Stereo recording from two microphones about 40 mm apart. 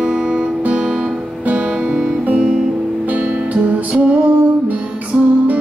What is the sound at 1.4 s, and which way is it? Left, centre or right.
Music, right.